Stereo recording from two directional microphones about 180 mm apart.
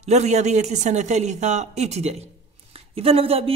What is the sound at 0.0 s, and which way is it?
A man's voice, 40° right (ahead or behind).